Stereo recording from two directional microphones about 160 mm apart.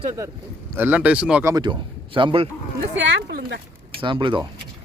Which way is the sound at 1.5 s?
30° right (ahead or behind).